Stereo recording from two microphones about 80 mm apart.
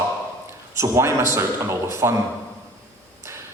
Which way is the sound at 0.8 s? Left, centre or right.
Right.